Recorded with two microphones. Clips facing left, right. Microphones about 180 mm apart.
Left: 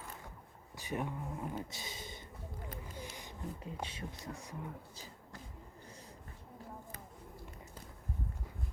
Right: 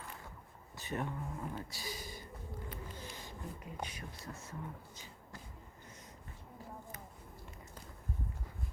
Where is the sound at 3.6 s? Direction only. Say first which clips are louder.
Left 2 dB; 30° left (ahead or behind).